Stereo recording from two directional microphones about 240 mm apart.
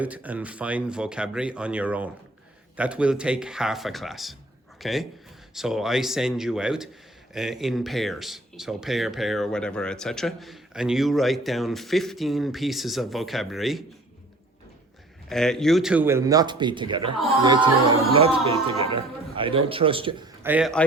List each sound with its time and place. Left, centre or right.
0.0 s a man's voice: centre
15.3 s a man's voice: centre